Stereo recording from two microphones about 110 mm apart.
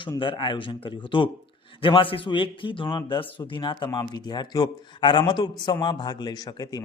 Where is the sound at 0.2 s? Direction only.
50° left (ahead or behind).